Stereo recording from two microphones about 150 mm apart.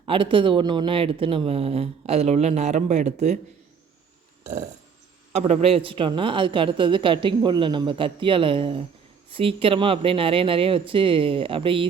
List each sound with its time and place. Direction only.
0.0 s speech: 35° right (ahead or behind); by 3.3 s 50° right (ahead or behind)
5.3 s speech: 45° right (ahead or behind)